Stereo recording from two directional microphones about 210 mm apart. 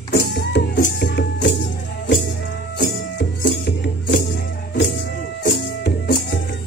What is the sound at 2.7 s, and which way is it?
Music, 45° left (ahead or behind).